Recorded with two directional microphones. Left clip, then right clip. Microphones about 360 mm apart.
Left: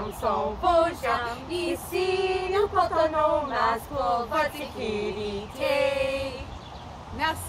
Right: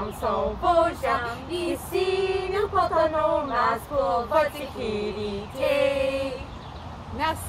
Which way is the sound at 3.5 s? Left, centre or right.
Centre.